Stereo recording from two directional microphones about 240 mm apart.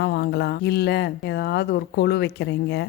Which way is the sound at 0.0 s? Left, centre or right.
Left.